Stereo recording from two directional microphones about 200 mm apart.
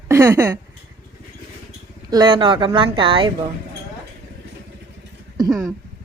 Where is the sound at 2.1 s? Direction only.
25° right (ahead or behind).